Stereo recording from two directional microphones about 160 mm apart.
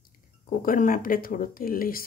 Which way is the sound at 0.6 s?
60° left (ahead or behind).